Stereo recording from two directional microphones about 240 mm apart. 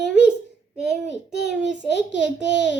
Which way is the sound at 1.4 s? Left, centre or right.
Centre.